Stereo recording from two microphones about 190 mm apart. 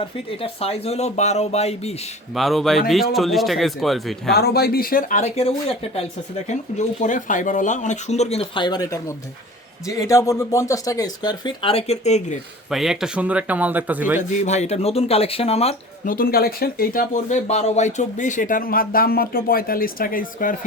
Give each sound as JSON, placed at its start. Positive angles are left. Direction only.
{"t": 0.0, "sound": "speech", "side_deg": 30}
{"t": 2.3, "sound": "a man's voice", "side_deg": 0}
{"t": 4.3, "sound": "speech", "side_deg": 55}
{"t": 12.7, "sound": "speech", "side_deg": 0}
{"t": 14.2, "sound": "speech", "side_deg": 35}
{"t": 16.0, "sound": "speech", "side_deg": 50}